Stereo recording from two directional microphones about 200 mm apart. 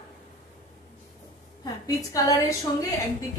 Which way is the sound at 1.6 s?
20° left (ahead or behind).